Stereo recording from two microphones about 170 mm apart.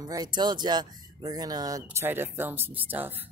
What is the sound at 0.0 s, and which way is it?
Speech, 20° right (ahead or behind).